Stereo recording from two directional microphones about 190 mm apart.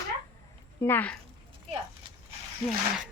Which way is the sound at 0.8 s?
10° left (ahead or behind).